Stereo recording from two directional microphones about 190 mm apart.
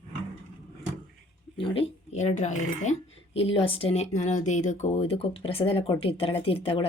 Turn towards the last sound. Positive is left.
turn(degrees=30)  # may be behind; listen again after turning